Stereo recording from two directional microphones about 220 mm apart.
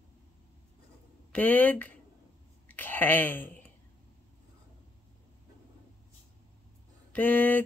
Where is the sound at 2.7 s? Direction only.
10° left (ahead or behind).